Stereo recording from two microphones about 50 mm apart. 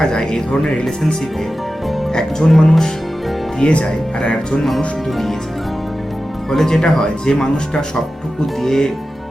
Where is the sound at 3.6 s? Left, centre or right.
Centre.